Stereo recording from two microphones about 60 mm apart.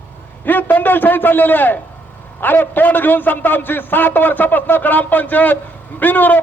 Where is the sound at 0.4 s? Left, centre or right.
Left.